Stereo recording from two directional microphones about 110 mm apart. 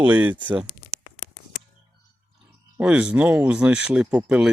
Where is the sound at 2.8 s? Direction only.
10° right (ahead or behind).